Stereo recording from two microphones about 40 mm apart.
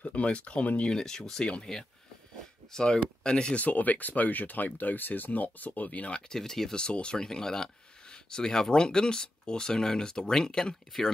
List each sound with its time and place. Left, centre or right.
0.0 s speech: left
0.8 s speech: centre
1.4 s speech: left
2.7 s speech: left
3.5 s speech: left
6.2 s speech: centre
6.8 s speech: left